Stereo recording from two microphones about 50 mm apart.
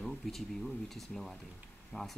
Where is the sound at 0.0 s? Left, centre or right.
Centre.